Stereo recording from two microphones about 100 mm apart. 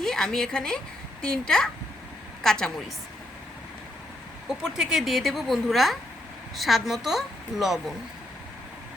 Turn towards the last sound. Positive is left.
turn(degrees=-5)  # may be behind; listen again after turning